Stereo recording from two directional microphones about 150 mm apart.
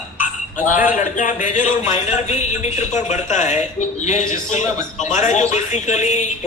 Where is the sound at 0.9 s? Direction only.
60° left (ahead or behind).